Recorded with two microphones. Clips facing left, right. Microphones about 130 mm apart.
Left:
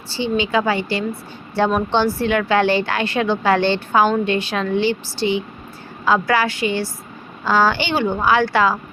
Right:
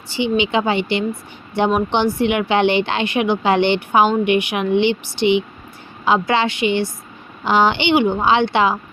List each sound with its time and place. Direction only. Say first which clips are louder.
0.1 s a woman's voice: right 1 dB; 20° right (ahead or behind)